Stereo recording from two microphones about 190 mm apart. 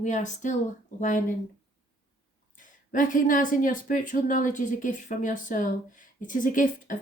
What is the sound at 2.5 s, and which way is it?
Speech, 45° left (ahead or behind).